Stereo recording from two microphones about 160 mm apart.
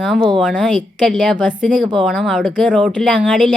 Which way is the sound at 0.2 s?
30° right (ahead or behind).